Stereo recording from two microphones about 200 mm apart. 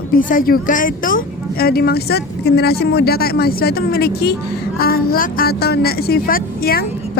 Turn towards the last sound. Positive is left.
turn(degrees=50)  # may be behind; listen again after turning